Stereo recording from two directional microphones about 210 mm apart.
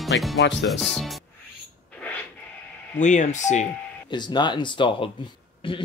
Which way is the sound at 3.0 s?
35° left (ahead or behind).